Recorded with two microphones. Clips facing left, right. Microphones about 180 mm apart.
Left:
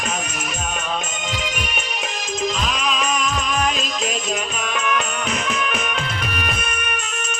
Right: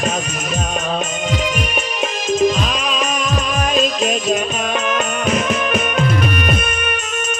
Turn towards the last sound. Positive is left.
turn(degrees=-65)  # may be behind; listen again after turning